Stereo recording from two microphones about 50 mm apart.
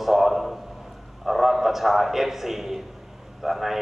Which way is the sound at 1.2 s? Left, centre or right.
Centre.